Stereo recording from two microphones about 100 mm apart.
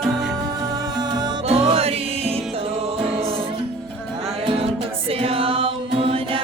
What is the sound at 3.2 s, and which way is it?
Music, 75° right (ahead or behind).